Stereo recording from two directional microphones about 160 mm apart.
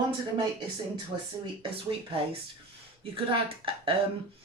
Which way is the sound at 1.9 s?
35° right (ahead or behind).